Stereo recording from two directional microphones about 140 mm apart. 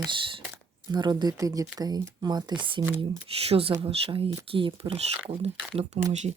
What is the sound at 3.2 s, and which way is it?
Speech, 45° right (ahead or behind).